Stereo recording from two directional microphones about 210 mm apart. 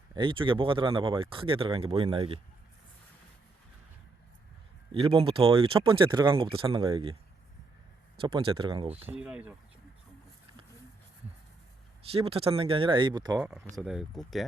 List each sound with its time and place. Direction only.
0.1 s speech: 25° right (ahead or behind)
4.9 s speech: 25° right (ahead or behind)
8.2 s speech: 25° right (ahead or behind)
9.0 s speech: 10° right (ahead or behind)
12.1 s speech: 30° right (ahead or behind)
13.7 s speech: 5° right (ahead or behind)